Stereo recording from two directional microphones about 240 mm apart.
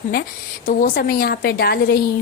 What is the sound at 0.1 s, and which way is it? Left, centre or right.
Speech, left.